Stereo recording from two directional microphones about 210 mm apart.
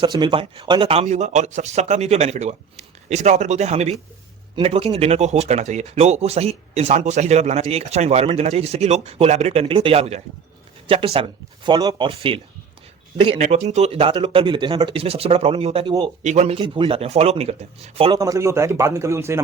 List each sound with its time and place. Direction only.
0.0 s speech: 20° right (ahead or behind)
18.2 s a man's voice: 15° right (ahead or behind)